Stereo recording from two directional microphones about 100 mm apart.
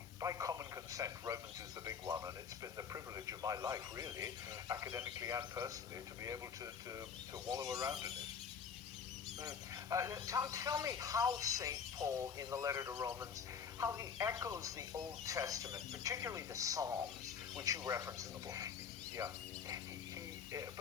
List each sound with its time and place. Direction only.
0.2 s a sound: 35° right (ahead or behind)
1.8 s speech: 35° right (ahead or behind)
7.4 s speech: 40° right (ahead or behind)
9.4 s speech: 35° right (ahead or behind)